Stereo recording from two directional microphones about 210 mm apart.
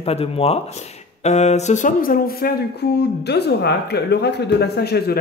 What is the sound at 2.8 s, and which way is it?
Speech, 50° left (ahead or behind).